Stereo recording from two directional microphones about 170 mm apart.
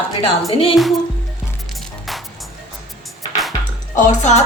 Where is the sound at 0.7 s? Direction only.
Centre (ahead or behind).